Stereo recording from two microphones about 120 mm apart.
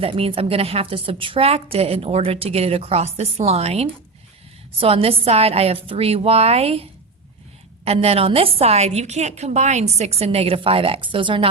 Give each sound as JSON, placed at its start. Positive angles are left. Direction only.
{"t": 0.0, "sound": "a woman's voice", "side_deg": -50}
{"t": 7.9, "sound": "a woman's voice", "side_deg": -55}